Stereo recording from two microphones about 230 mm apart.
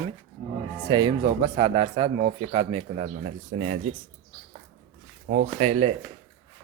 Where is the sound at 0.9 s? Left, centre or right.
Right.